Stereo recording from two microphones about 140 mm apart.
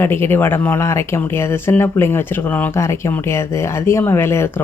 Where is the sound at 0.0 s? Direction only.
15° left (ahead or behind).